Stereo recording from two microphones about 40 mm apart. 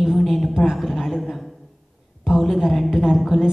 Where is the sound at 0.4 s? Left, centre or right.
Centre.